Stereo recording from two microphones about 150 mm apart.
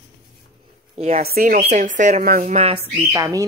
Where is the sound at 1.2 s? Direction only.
70° right (ahead or behind).